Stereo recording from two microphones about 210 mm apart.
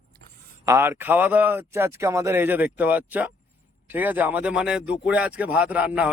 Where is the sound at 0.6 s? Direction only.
10° right (ahead or behind).